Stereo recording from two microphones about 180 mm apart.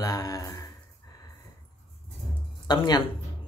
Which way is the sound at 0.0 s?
20° left (ahead or behind).